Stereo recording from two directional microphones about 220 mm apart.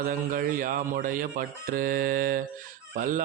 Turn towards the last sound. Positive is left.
turn(degrees=-35)  # may be behind; listen again after turning